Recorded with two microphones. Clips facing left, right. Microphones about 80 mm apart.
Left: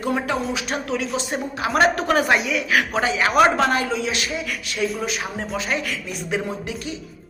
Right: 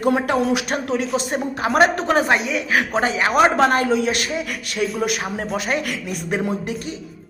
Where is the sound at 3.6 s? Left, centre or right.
Right.